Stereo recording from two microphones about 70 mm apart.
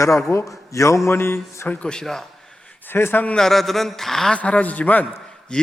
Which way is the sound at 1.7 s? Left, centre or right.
Centre.